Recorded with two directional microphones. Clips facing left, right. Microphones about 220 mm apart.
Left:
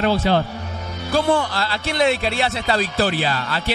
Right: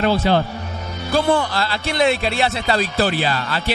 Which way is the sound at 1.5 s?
10° right (ahead or behind).